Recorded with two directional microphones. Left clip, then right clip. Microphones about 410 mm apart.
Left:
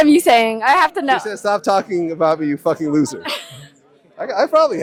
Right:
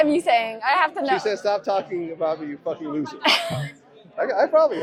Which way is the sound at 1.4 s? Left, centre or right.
Left.